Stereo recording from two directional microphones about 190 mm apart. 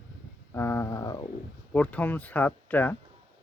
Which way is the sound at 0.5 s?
15° left (ahead or behind).